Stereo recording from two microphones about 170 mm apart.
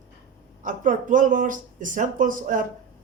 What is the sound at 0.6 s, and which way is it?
Speech, 50° right (ahead or behind).